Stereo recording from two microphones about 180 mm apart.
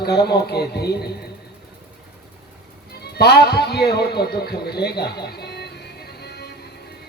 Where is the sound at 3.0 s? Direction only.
65° left (ahead or behind).